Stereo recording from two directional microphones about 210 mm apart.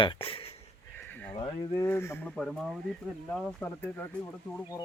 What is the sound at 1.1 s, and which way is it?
Horse, 5° left (ahead or behind).